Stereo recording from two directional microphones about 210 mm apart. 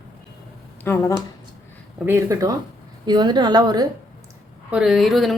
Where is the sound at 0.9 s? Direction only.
10° left (ahead or behind).